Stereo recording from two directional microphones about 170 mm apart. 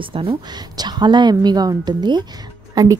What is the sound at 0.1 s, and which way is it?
A woman's voice, 30° right (ahead or behind).